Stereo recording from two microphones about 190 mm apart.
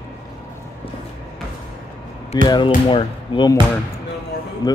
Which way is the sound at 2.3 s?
20° left (ahead or behind).